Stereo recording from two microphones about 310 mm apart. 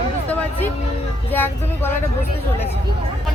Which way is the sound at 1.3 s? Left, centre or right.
Centre.